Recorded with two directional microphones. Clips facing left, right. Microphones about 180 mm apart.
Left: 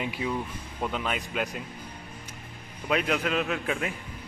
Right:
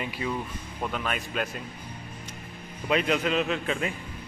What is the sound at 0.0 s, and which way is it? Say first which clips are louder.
Speech: left 1 dB; 15° left (ahead or behind).